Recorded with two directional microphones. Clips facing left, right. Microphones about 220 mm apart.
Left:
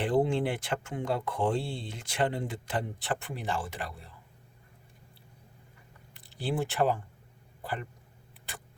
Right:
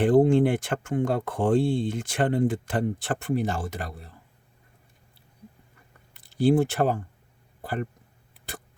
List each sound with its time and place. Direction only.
0.0 s speech: 45° right (ahead or behind)
6.2 s speech: 45° right (ahead or behind)
7.6 s a sound: 45° right (ahead or behind)